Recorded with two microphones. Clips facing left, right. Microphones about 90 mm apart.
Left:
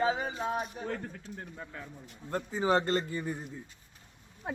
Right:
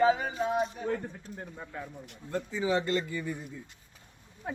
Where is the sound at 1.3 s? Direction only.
5° right (ahead or behind).